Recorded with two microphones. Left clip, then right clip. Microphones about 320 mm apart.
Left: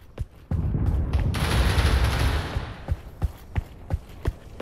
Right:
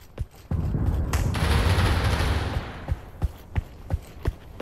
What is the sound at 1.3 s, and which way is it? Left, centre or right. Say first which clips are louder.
Gunshot: even; centre.